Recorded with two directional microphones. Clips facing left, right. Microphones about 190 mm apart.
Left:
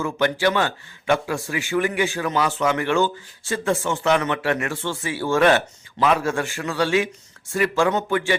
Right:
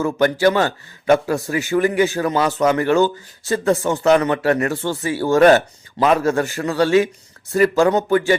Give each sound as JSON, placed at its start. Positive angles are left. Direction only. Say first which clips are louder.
{"t": 0.0, "sound": "a man's voice", "louder": "right 5 dB", "side_deg": -40}